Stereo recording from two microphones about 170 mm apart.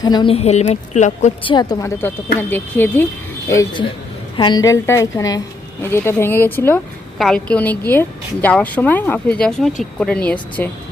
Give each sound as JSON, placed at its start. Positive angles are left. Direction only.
{"t": 0.0, "sound": "a woman's voice", "side_deg": 25}
{"t": 1.5, "sound": "a woman's voice", "side_deg": 25}